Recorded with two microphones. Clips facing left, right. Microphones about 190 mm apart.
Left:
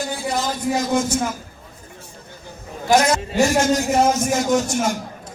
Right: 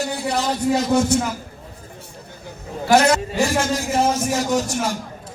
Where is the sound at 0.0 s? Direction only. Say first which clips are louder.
Right 1 dB; 65° right (ahead or behind).